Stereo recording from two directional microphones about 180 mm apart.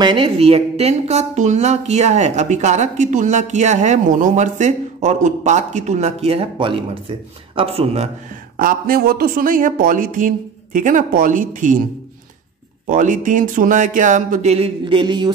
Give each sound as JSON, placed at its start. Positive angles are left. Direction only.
{"t": 0.0, "sound": "speech", "side_deg": -30}
{"t": 8.5, "sound": "speech", "side_deg": -50}
{"t": 12.8, "sound": "speech", "side_deg": -45}